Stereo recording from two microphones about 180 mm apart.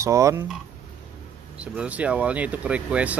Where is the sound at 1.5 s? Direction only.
5° right (ahead or behind).